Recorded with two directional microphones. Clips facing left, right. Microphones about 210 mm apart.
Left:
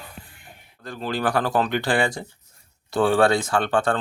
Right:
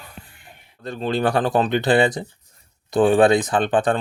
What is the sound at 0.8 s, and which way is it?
Speech, 25° right (ahead or behind).